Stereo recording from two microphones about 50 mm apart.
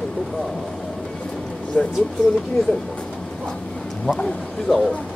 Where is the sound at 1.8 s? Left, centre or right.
Left.